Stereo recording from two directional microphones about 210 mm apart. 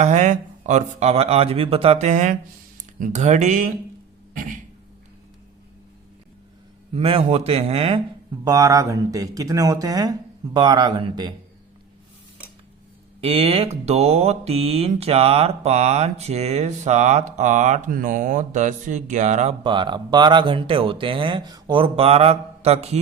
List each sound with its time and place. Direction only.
0.0 s speech: 35° right (ahead or behind)
6.9 s speech: 25° right (ahead or behind)
13.2 s speech: 30° right (ahead or behind)